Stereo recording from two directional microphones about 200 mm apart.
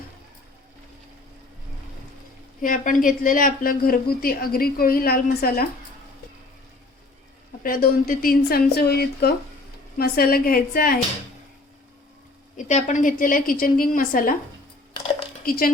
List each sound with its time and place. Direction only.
2.6 s a woman's voice: 40° left (ahead or behind)
7.6 s a woman's voice: 45° left (ahead or behind)
12.5 s a woman's voice: 35° left (ahead or behind)
15.4 s a woman's voice: 45° left (ahead or behind)